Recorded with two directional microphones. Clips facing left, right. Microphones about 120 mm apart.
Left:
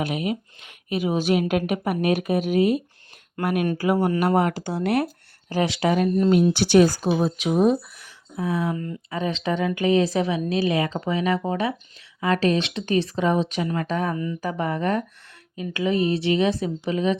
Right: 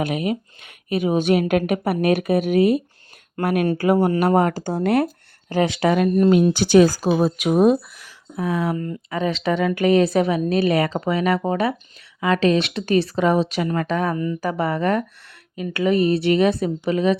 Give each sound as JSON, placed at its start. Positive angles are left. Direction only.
{"t": 0.0, "sound": "speech", "side_deg": -55}
{"t": 5.9, "sound": "speech", "side_deg": -65}
{"t": 8.7, "sound": "speech", "side_deg": -45}
{"t": 9.0, "sound": "speech", "side_deg": -90}
{"t": 12.2, "sound": "speech", "side_deg": -90}
{"t": 13.7, "sound": "speech", "side_deg": -90}
{"t": 14.4, "sound": "speech", "side_deg": -75}
{"t": 15.5, "sound": "speech", "side_deg": -65}